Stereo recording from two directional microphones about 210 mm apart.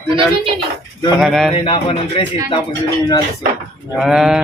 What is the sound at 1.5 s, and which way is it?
Speech, 25° left (ahead or behind).